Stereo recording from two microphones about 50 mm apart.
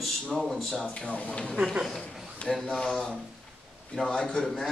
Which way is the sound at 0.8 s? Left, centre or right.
Left.